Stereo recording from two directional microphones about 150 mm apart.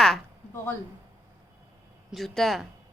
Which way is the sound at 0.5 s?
15° left (ahead or behind).